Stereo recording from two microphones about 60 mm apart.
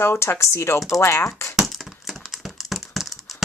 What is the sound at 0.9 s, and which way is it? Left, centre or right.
Speech, left.